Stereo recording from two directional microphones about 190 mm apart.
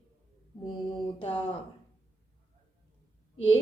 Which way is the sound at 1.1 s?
25° left (ahead or behind).